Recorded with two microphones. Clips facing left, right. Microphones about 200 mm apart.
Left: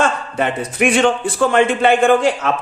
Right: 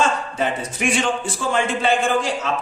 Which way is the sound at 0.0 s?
60° left (ahead or behind).